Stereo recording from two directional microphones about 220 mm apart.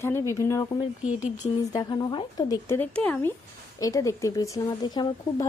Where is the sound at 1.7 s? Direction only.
15° left (ahead or behind).